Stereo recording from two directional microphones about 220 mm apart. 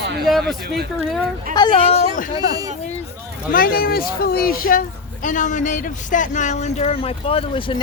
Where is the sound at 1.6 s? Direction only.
20° left (ahead or behind).